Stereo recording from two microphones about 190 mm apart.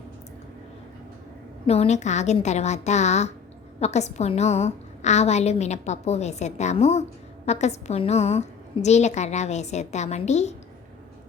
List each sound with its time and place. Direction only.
1.6 s a woman's voice: 35° left (ahead or behind)